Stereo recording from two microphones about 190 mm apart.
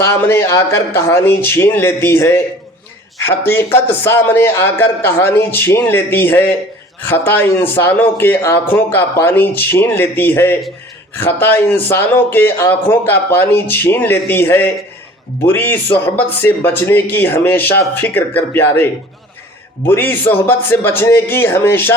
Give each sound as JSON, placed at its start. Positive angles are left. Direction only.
{"t": 0.0, "sound": "speech", "side_deg": 15}